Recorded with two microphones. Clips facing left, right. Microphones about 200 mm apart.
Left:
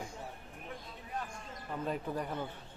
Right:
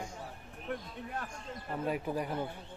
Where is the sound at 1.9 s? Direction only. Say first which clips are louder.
Right 3 dB; 10° right (ahead or behind).